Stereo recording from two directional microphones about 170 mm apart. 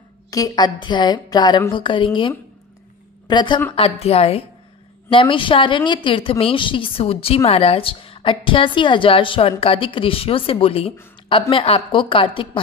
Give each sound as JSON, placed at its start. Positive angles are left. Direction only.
{"t": 0.3, "sound": "a woman's voice", "side_deg": 25}
{"t": 3.3, "sound": "a woman's voice", "side_deg": 25}
{"t": 3.7, "sound": "a woman's voice", "side_deg": 35}